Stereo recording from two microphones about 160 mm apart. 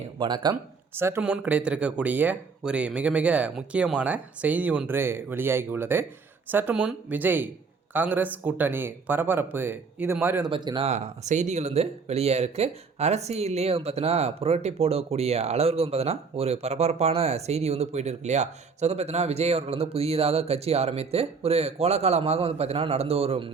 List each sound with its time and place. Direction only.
0.2 s speech: 30° right (ahead or behind)
0.9 s speech: 15° right (ahead or behind)
10.5 s speech: 30° right (ahead or behind)
10.8 s speech: 45° right (ahead or behind)